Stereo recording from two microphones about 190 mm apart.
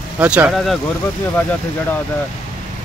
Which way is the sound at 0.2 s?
5° right (ahead or behind).